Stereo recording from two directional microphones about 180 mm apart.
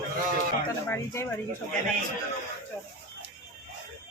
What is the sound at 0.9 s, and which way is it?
Speech, 15° left (ahead or behind).